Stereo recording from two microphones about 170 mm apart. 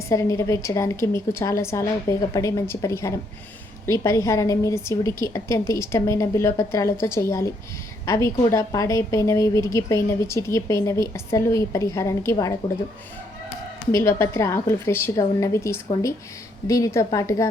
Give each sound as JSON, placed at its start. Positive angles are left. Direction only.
{"t": 0.1, "sound": "a woman's voice", "side_deg": 20}
{"t": 13.9, "sound": "a woman's voice", "side_deg": 15}